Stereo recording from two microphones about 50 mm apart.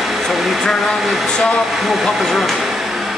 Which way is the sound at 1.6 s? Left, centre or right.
Centre.